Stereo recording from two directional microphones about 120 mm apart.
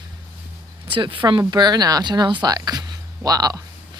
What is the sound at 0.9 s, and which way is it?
Speech, 45° right (ahead or behind).